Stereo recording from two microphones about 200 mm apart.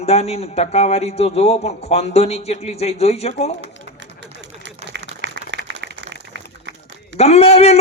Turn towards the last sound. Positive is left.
turn(degrees=30)  # may be behind; listen again after turning